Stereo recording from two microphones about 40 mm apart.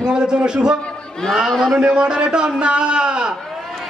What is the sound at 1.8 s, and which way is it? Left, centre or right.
A man's voice, right.